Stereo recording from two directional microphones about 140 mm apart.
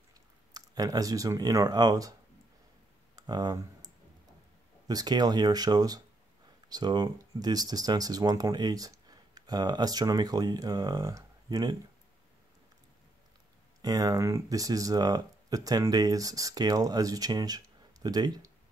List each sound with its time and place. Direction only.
0.5 s speech: 25° right (ahead or behind)
3.2 s a sound: 30° right (ahead or behind)
4.8 s speech: 30° right (ahead or behind)
13.7 s speech: 30° right (ahead or behind)